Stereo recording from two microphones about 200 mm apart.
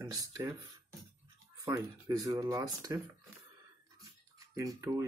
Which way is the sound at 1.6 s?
20° right (ahead or behind).